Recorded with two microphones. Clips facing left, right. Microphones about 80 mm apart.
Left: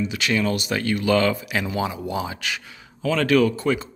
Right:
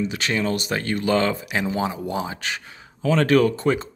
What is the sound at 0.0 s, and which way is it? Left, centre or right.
Speech, right.